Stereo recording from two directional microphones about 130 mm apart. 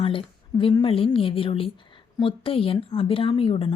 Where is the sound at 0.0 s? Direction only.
40° left (ahead or behind).